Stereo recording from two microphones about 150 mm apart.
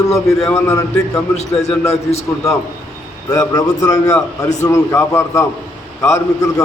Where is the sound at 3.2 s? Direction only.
25° left (ahead or behind).